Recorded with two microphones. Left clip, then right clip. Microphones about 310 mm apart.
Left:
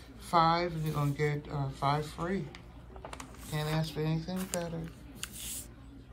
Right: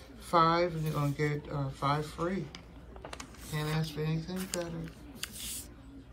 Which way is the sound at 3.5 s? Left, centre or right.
Centre.